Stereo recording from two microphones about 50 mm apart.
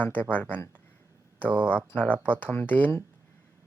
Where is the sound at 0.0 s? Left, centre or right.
Left.